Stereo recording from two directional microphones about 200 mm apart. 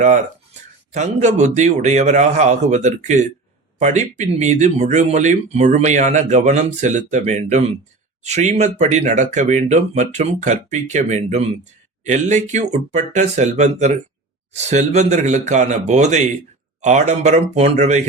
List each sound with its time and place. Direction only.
0.0 s speech: 35° right (ahead or behind)